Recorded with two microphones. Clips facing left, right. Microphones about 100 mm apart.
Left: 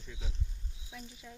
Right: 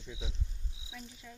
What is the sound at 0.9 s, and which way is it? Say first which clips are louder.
Speech: even; 5° left (ahead or behind).